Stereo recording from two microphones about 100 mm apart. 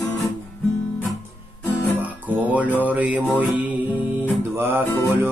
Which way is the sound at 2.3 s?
15° right (ahead or behind).